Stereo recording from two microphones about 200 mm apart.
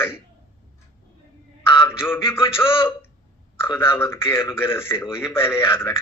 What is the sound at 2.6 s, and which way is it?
Speech, 25° left (ahead or behind).